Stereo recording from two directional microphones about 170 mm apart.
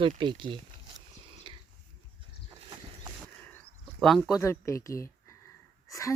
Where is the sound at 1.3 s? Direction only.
30° right (ahead or behind).